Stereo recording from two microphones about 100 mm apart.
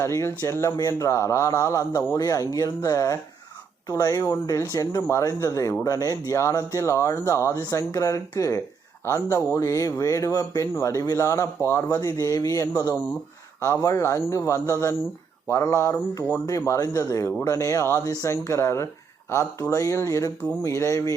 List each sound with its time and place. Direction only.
0.0 s a man's voice: 30° left (ahead or behind)